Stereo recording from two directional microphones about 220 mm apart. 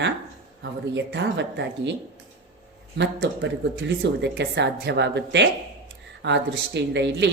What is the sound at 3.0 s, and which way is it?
Speech, 55° right (ahead or behind).